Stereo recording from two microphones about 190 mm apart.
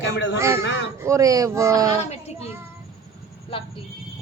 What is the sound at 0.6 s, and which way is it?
Speech, 75° left (ahead or behind).